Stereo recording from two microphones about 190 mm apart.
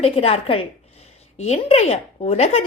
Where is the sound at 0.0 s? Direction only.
30° left (ahead or behind).